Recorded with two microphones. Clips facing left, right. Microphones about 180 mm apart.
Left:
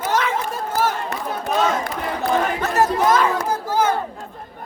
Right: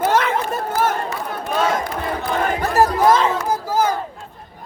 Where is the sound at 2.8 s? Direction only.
25° right (ahead or behind).